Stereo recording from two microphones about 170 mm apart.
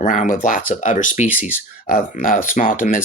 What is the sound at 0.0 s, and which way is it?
Speech, 50° left (ahead or behind).